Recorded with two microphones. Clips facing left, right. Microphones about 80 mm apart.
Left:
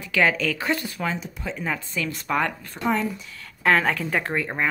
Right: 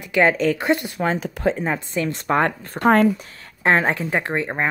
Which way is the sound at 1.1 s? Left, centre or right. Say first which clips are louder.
Right 9 dB; right.